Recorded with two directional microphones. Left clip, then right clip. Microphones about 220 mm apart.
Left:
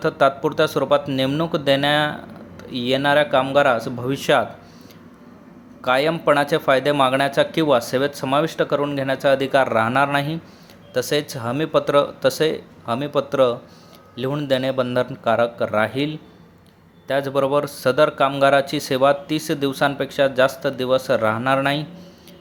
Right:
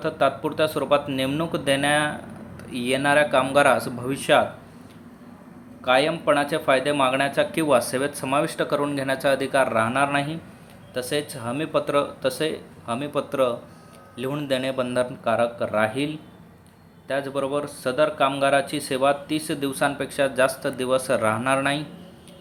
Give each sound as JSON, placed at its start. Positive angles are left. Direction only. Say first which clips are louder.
{"t": 0.0, "sound": "speech", "louder": "left 5 dB", "side_deg": 20}
{"t": 5.8, "sound": "speech", "louder": "left 2 dB", "side_deg": 25}